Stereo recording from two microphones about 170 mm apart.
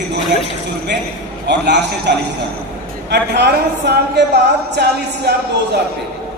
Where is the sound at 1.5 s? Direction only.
80° right.